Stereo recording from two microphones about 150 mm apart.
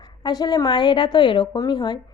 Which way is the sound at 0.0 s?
30° left (ahead or behind).